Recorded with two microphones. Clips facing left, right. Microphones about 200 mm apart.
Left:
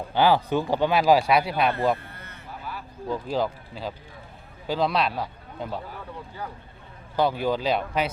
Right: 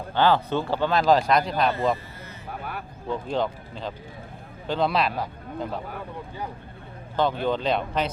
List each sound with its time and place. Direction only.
0.1 s speech: 10° left (ahead or behind)
2.5 s a sound: 60° right (ahead or behind)
3.1 s speech: 5° left (ahead or behind)
7.2 s speech: 10° left (ahead or behind)